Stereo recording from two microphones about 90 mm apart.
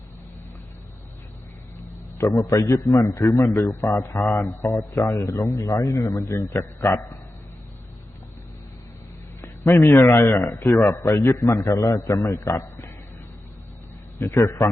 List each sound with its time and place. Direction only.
2.1 s a man's voice: 35° left (ahead or behind)
9.9 s a man's voice: 35° left (ahead or behind)
14.2 s a man's voice: 30° left (ahead or behind)